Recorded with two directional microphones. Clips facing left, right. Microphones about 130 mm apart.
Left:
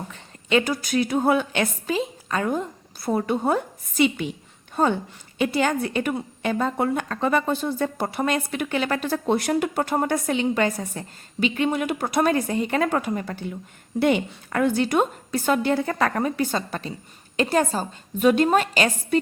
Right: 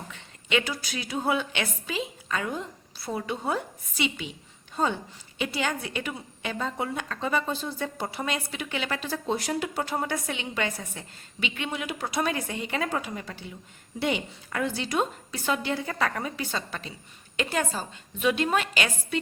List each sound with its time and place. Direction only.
0.1 s a woman's voice: 40° left (ahead or behind)